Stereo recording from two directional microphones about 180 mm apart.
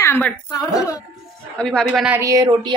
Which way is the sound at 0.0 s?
15° left (ahead or behind).